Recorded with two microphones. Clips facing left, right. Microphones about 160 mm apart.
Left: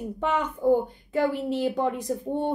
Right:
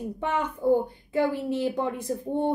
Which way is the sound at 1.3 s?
15° left (ahead or behind).